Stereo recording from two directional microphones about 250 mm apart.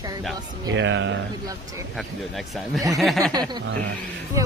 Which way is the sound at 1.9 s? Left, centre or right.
Centre.